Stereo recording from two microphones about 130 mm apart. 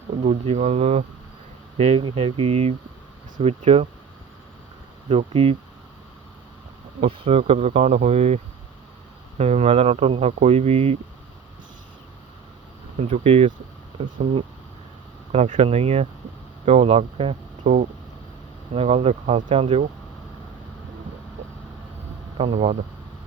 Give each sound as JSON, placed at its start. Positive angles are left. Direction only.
{"t": 0.2, "sound": "speech", "side_deg": -55}
{"t": 5.0, "sound": "speech", "side_deg": -50}
{"t": 7.0, "sound": "speech", "side_deg": -55}
{"t": 9.4, "sound": "speech", "side_deg": -55}
{"t": 13.0, "sound": "speech", "side_deg": -55}
{"t": 15.3, "sound": "speech", "side_deg": -60}
{"t": 17.6, "sound": "speech", "side_deg": -65}
{"t": 18.7, "sound": "speech", "side_deg": -50}
{"t": 22.4, "sound": "speech", "side_deg": -45}